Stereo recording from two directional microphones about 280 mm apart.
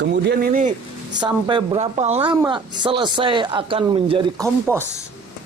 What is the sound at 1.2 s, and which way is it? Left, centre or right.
Speech, centre.